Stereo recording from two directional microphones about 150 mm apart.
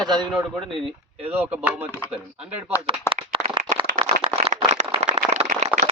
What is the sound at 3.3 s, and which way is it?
Clapping, 35° right (ahead or behind).